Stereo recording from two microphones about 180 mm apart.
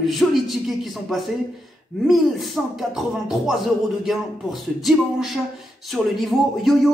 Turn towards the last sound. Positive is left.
turn(degrees=0)  # may be behind; listen again after turning